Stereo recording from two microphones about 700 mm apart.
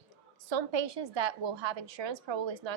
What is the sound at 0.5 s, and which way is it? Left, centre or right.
A woman's voice, right.